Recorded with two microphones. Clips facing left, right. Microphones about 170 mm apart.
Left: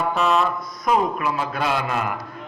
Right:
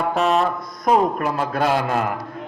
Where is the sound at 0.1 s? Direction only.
45° right (ahead or behind).